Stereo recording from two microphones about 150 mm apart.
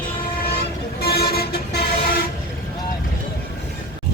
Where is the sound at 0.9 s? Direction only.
90° left.